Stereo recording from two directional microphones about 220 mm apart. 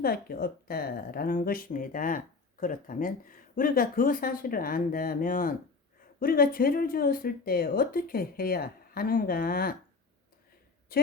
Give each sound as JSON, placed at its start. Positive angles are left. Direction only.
{"t": 0.0, "sound": "speech", "side_deg": 45}
{"t": 10.9, "sound": "a woman's voice", "side_deg": 45}